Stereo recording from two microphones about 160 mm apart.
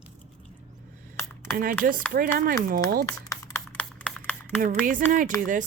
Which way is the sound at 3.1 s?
20° left (ahead or behind).